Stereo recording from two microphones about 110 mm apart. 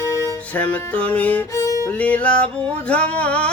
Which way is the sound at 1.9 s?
15° left (ahead or behind).